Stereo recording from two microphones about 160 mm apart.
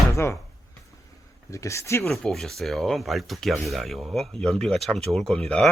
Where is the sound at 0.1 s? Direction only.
15° left (ahead or behind).